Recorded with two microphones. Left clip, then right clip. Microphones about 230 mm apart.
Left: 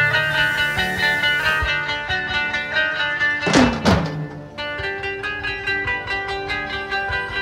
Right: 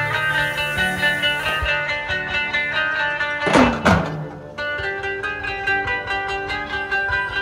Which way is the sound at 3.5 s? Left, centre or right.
Right.